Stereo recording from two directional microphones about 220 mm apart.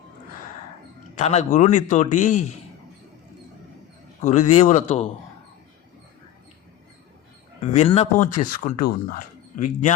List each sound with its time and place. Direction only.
1.1 s speech: 30° left (ahead or behind)
4.2 s speech: 30° left (ahead or behind)
7.6 s speech: 30° left (ahead or behind)